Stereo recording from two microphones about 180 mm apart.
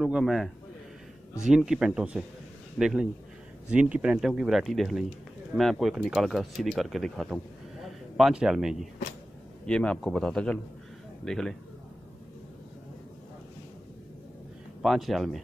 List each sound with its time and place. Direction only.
0.0 s speech: centre (ahead or behind)
14.8 s speech: centre (ahead or behind)